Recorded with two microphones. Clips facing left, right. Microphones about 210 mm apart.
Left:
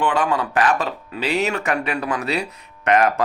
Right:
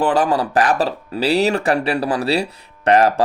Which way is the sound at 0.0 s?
35° right (ahead or behind).